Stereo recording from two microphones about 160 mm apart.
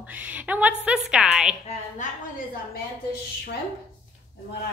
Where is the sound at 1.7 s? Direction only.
55° left (ahead or behind).